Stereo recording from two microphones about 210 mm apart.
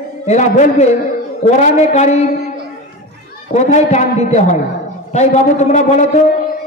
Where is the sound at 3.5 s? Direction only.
35° left (ahead or behind).